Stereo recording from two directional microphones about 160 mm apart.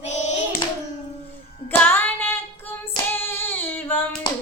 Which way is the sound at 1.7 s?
15° left (ahead or behind).